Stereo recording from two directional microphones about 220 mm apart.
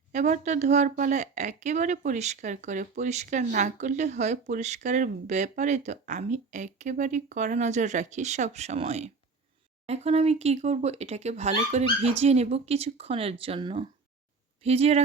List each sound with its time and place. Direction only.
0.1 s speech: 30° right (ahead or behind)